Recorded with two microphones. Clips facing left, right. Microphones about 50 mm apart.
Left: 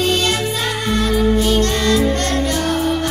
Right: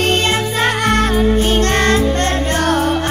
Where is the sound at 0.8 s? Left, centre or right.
Right.